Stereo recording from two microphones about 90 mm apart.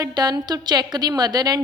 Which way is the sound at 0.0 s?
45° right (ahead or behind).